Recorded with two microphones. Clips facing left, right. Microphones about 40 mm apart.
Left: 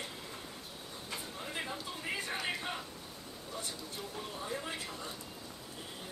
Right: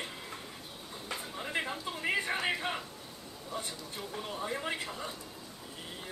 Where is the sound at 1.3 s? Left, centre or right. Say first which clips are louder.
Right 6 dB; right.